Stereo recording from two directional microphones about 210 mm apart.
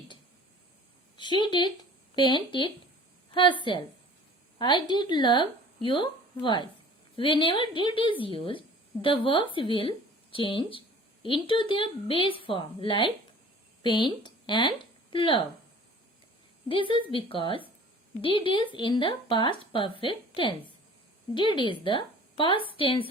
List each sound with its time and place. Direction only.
1.1 s speech: 20° left (ahead or behind)
16.6 s speech: 25° left (ahead or behind)